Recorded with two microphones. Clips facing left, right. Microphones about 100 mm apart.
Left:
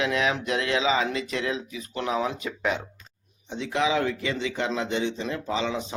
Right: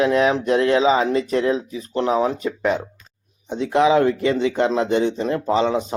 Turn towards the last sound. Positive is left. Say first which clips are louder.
# right 9 dB
turn(degrees=-45)  # may be behind; listen again after turning